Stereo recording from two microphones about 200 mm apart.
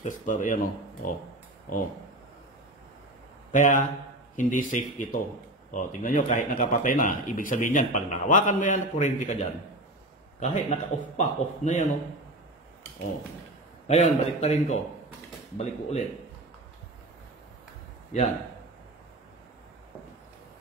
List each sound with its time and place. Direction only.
0.0 s speech: 40° left (ahead or behind)
3.5 s speech: 40° left (ahead or behind)
13.8 s speech: 35° left (ahead or behind)